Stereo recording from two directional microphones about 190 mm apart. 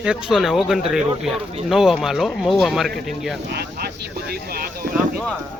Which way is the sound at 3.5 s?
55° right (ahead or behind).